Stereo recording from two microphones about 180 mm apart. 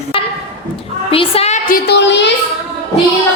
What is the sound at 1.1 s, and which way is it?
Speech, 30° left (ahead or behind).